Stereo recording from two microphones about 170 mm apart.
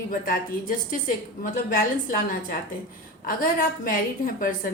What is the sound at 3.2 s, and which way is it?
A woman's voice, 55° left (ahead or behind).